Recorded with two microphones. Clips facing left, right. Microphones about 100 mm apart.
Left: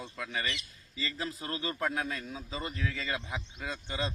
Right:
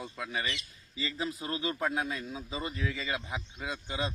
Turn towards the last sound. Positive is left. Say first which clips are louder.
# right 1 dB
turn(degrees=-20)  # may be behind; listen again after turning